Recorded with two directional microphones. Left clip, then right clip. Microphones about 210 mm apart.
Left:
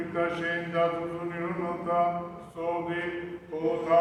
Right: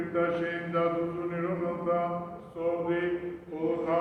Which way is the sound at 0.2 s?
20° left (ahead or behind).